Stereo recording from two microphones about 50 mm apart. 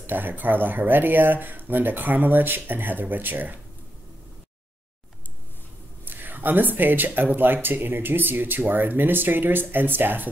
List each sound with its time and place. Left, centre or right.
0.0 s speech: right
6.0 s speech: right